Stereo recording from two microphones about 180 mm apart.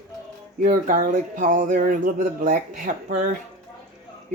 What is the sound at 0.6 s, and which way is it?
Speech, 45° right (ahead or behind).